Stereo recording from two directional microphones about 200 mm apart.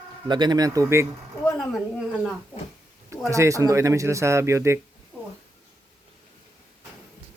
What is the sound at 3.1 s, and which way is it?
Speech, 15° right (ahead or behind).